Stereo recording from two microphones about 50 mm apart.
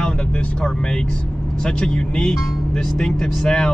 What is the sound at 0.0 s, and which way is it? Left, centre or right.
Vehicle, left.